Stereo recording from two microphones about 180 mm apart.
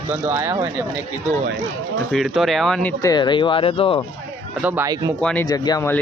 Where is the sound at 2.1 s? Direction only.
Centre (ahead or behind).